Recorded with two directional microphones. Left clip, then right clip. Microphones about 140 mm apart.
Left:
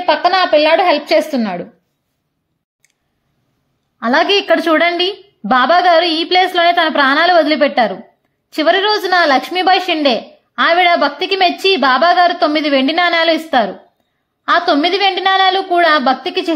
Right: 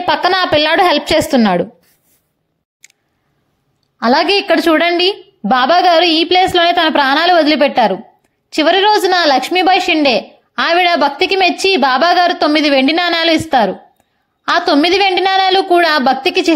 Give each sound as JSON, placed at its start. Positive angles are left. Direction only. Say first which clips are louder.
{"t": 0.0, "sound": "a woman's voice", "louder": "left 1 dB", "side_deg": -45}
{"t": 4.0, "sound": "a woman's voice", "louder": "right 1 dB", "side_deg": -15}